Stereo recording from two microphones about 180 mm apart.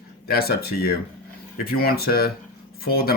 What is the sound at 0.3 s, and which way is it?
Speech, 60° left (ahead or behind).